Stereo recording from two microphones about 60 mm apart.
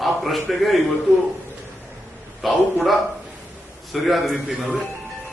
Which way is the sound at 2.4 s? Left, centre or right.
Centre.